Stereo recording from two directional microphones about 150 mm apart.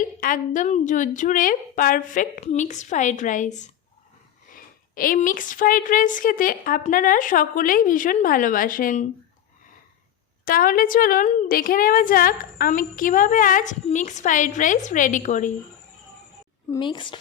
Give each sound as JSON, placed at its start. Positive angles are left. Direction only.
{"t": 0.0, "sound": "a woman's voice", "side_deg": 65}
{"t": 4.5, "sound": "a woman's voice", "side_deg": 65}
{"t": 10.4, "sound": "a woman's voice", "side_deg": 70}
{"t": 16.7, "sound": "a woman's voice", "side_deg": 30}